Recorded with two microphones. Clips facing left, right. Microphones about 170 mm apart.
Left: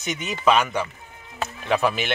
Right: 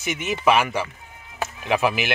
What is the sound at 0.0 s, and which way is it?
Speech, 5° right (ahead or behind).